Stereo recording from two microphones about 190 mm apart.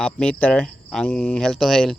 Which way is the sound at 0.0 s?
5° left (ahead or behind).